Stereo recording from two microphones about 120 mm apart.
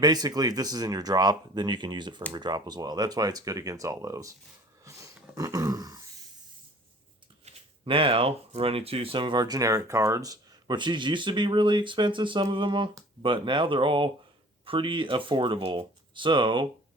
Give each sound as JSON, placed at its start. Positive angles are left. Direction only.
{"t": 0.0, "sound": "speech", "side_deg": -35}
{"t": 4.9, "sound": "a sound", "side_deg": -25}
{"t": 5.3, "sound": "speech", "side_deg": -30}
{"t": 7.4, "sound": "speech", "side_deg": -50}